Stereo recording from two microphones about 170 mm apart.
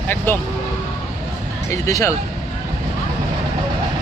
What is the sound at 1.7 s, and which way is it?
Speech, 15° left (ahead or behind).